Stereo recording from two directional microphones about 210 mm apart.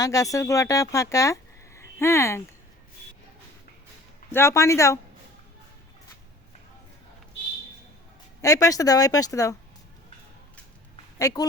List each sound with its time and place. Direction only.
0.0 s speech: 15° left (ahead or behind)
4.3 s speech: 10° left (ahead or behind)
8.4 s speech: 15° left (ahead or behind)
11.2 s speech: 15° left (ahead or behind)